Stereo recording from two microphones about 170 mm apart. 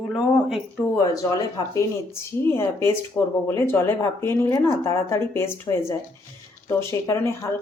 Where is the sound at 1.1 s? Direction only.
20° left (ahead or behind).